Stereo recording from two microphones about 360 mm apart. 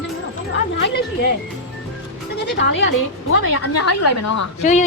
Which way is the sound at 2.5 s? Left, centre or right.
Left.